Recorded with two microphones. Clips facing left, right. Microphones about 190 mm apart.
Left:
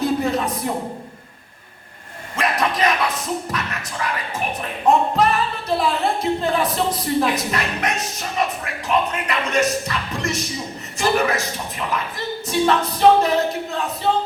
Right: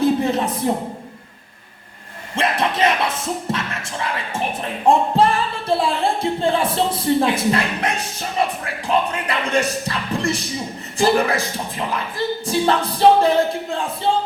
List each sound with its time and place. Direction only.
0.0 s a sound: 25° right (ahead or behind)
0.7 s music: 30° right (ahead or behind)
2.3 s a sound: 25° right (ahead or behind)
3.5 s music: 25° right (ahead or behind)
4.6 s speech: 30° right (ahead or behind)
8.9 s music: 30° right (ahead or behind)